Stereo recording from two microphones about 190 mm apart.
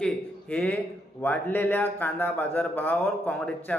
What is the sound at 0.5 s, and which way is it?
A man's voice, 5° left (ahead or behind).